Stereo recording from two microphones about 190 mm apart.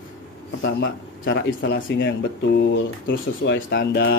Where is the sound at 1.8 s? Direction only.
50° left (ahead or behind); by 4.2 s 70° left (ahead or behind).